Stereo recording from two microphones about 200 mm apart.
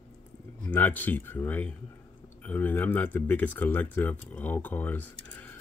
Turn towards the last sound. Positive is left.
turn(degrees=10)  # may be behind; listen again after turning